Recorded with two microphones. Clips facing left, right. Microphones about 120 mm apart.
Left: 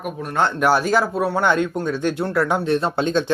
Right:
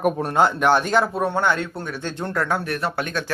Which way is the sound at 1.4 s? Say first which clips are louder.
Left 3 dB; 15° left (ahead or behind).